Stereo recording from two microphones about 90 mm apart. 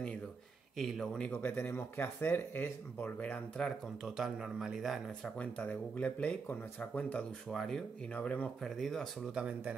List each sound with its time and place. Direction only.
0.7 s speech: centre (ahead or behind)
1.3 s speech: 20° left (ahead or behind)
3.6 s speech: 5° right (ahead or behind)
5.4 s speech: 15° left (ahead or behind)
8.6 s speech: centre (ahead or behind)
9.3 s speech: 10° right (ahead or behind)